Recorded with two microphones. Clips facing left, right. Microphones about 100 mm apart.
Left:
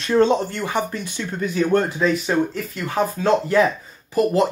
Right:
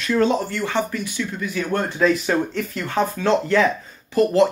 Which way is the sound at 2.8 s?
15° left (ahead or behind).